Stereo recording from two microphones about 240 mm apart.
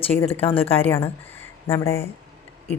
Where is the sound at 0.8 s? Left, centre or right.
Centre.